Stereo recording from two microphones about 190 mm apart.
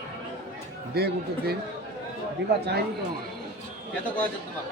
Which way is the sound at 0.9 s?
55° right (ahead or behind).